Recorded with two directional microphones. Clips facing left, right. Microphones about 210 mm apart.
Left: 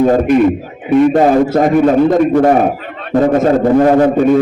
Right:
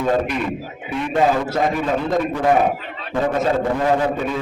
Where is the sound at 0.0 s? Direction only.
40° left (ahead or behind).